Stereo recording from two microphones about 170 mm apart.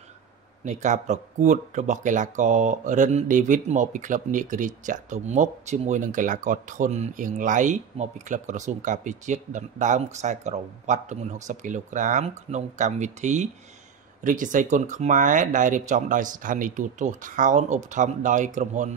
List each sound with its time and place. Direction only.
0.7 s speech: 45° right (ahead or behind)